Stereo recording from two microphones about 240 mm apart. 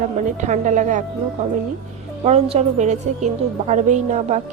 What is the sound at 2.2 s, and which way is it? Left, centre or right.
A woman's voice, right.